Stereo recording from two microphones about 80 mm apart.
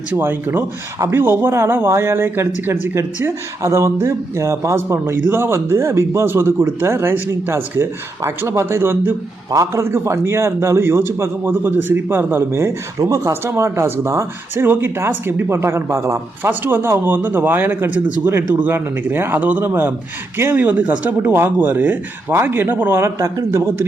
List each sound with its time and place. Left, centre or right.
0.2 s speech: right
9.5 s speech: right
13.0 s speech: right
13.4 s speech: right
16.5 s speech: right